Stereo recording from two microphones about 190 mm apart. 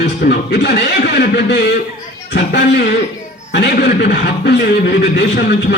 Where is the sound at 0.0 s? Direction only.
55° left (ahead or behind).